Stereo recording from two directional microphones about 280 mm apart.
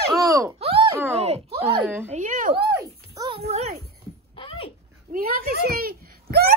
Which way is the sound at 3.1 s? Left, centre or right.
Centre.